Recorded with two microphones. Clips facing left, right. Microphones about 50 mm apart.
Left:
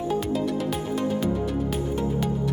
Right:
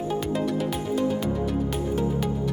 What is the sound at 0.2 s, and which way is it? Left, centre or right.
Music, centre.